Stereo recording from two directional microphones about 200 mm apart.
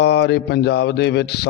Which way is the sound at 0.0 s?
55° left (ahead or behind).